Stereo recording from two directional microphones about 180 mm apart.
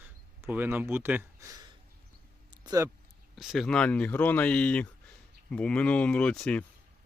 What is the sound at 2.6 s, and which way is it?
Speech, 20° right (ahead or behind).